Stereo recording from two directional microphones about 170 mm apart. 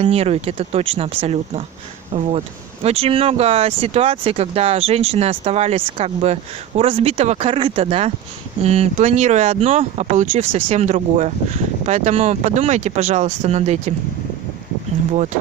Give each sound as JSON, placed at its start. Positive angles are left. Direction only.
{"t": 0.0, "sound": "speech", "side_deg": -35}